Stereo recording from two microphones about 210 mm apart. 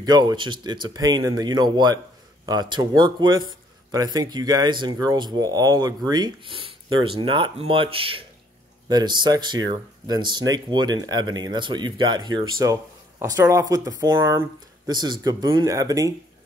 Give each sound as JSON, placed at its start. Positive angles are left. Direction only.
{"t": 0.0, "sound": "a man's voice", "side_deg": -20}